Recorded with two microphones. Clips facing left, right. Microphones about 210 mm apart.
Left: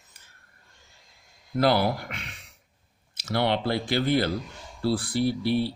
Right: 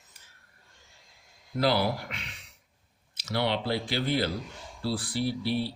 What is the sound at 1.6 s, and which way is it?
Speech, 50° left (ahead or behind).